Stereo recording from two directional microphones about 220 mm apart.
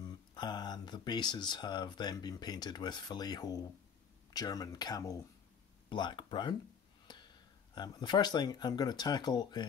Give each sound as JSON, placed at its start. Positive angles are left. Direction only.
{"t": 0.3, "sound": "speech", "side_deg": 20}
{"t": 7.7, "sound": "speech", "side_deg": 20}